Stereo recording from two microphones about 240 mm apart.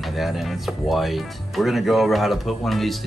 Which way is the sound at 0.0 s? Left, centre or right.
Centre.